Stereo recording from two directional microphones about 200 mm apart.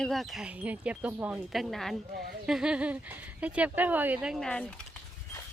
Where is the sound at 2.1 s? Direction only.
50° right (ahead or behind).